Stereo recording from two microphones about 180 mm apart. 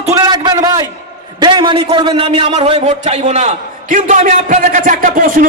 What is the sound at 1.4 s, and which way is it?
A man's voice, 25° right (ahead or behind).